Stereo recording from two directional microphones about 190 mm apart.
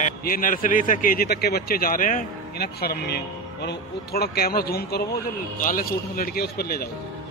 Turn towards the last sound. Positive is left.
turn(degrees=55)  # may be behind; listen again after turning